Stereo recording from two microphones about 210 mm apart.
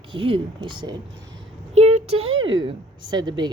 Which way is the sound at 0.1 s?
25° right (ahead or behind).